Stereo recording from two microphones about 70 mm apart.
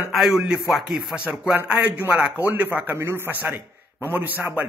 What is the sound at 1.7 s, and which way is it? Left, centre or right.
Speech, centre.